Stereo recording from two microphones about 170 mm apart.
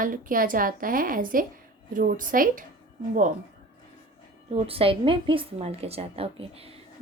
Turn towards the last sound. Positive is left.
turn(degrees=-35)  # may be behind; listen again after turning